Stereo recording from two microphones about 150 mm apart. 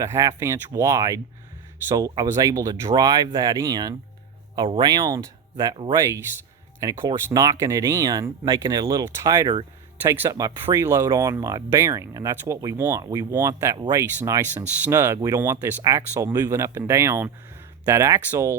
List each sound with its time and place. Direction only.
0.0 s speech: 20° right (ahead or behind)
6.0 s speech: 20° right (ahead or behind)